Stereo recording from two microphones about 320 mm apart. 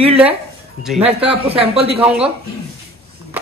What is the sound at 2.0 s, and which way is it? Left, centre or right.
Speech, centre.